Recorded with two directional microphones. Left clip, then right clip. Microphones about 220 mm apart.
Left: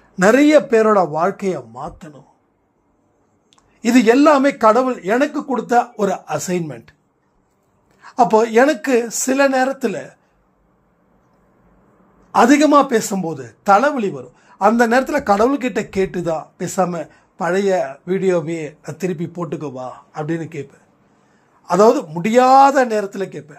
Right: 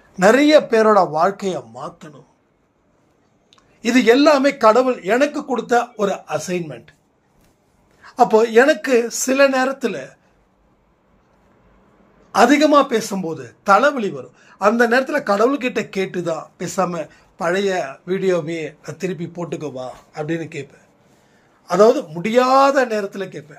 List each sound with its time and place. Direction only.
0.2 s a man's voice: 30° left (ahead or behind)
3.4 s a man's voice: 30° left (ahead or behind)
8.0 s a man's voice: 30° left (ahead or behind)
12.3 s a man's voice: 30° left (ahead or behind)